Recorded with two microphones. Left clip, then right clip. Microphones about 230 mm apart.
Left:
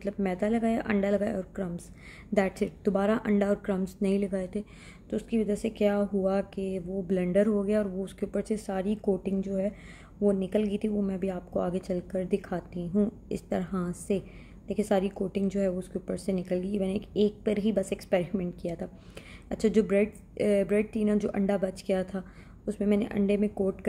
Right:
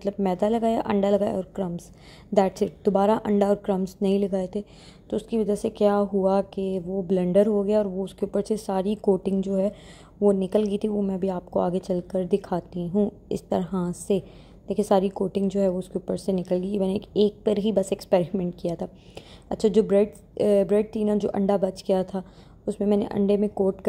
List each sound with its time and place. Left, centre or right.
0.0 s a woman's voice: centre